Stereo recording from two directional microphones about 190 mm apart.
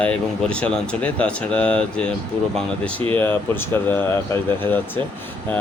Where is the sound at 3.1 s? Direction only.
10° left (ahead or behind).